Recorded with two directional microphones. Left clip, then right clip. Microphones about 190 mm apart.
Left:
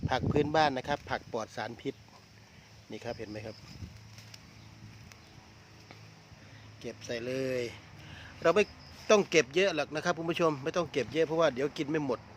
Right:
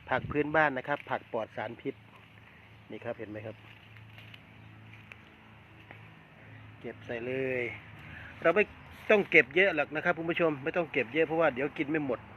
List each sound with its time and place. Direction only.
0.1 s speech: 35° left (ahead or behind)
6.8 s speech: 30° left (ahead or behind)